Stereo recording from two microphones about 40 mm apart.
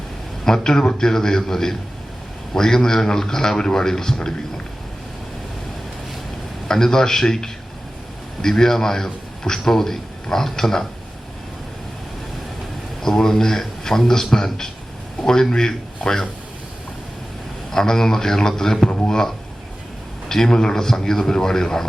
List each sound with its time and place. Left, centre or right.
0.4 s a man's voice: centre
6.7 s a man's voice: centre
13.0 s a man's voice: centre
17.7 s a man's voice: centre
18.9 s speech: left
20.2 s a man's voice: centre